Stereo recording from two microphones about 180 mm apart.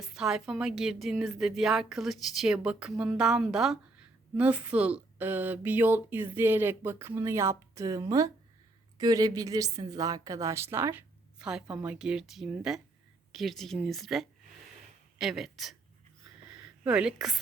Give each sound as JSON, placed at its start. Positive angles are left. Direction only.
{"t": 0.0, "sound": "a woman's voice", "side_deg": -5}
{"t": 16.8, "sound": "a woman's voice", "side_deg": -5}